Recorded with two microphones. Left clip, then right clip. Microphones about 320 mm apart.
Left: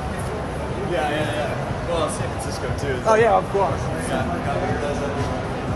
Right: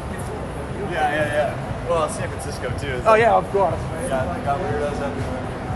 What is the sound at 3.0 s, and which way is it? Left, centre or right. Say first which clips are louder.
Speech: right 2 dB; right.